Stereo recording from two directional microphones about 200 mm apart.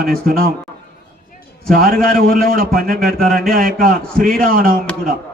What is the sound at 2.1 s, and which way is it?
Speech, 45° right (ahead or behind).